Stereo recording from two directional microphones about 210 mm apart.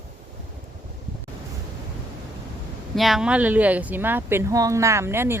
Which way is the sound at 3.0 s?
Centre (ahead or behind).